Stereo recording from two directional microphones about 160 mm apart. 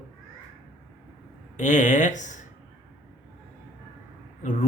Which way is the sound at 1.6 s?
50° left (ahead or behind).